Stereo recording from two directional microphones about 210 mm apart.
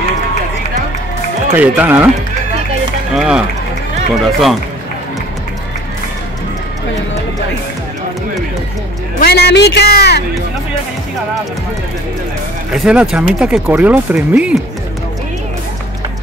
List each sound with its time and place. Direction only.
1.5 s speech: 10° right (ahead or behind)
3.2 s speech: 5° right (ahead or behind)
9.2 s a man's voice: 50° left (ahead or behind)
12.7 s speech: centre (ahead or behind)